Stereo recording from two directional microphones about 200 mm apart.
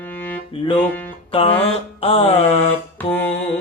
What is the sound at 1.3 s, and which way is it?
Mantra, 30° left (ahead or behind).